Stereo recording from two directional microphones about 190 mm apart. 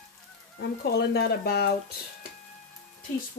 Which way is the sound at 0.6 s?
60° left (ahead or behind).